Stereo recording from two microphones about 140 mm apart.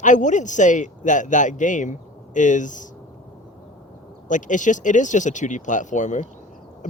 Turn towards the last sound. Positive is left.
turn(degrees=65)  # may be behind; listen again after turning